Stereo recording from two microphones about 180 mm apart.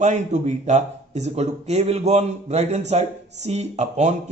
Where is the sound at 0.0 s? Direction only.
40° right (ahead or behind).